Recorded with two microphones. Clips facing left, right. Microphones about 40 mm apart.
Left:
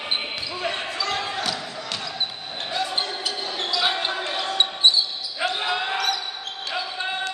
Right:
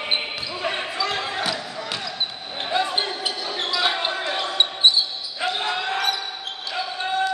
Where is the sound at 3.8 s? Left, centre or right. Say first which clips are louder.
Right 1 dB; centre.